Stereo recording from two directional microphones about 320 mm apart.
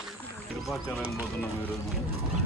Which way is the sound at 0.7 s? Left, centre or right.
Centre.